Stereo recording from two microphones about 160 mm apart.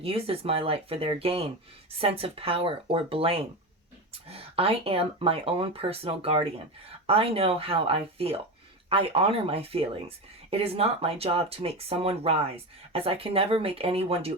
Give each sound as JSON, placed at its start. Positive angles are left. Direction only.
{"t": 0.0, "sound": "speech", "side_deg": -35}